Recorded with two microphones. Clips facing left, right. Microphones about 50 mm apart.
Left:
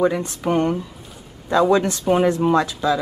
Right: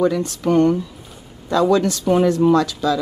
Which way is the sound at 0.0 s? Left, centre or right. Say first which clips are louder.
Right 1 dB; left.